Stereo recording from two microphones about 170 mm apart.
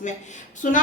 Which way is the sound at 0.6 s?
50° left (ahead or behind).